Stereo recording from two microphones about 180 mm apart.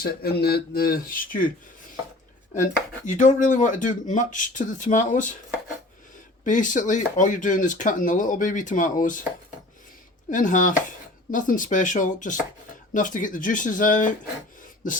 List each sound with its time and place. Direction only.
0.0 s speech: 60° left (ahead or behind)
3.1 s speech: 45° left (ahead or behind)
6.4 s speech: 45° left (ahead or behind)
10.2 s speech: 45° left (ahead or behind)